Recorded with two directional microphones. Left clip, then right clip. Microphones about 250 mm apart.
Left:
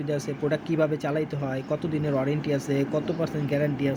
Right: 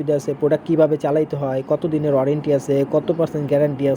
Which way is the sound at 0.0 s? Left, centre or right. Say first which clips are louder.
Right 9 dB; centre.